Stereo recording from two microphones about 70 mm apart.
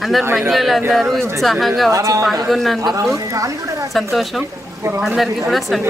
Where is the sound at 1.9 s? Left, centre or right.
Right.